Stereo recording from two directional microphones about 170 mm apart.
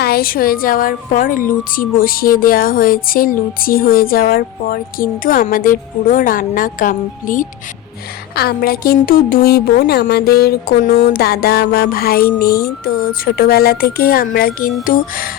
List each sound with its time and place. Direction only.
0.0 s a woman's voice: 60° left (ahead or behind)
8.4 s a woman's voice: 65° left (ahead or behind)